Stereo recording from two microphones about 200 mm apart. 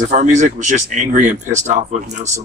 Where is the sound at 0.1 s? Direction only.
35° right (ahead or behind).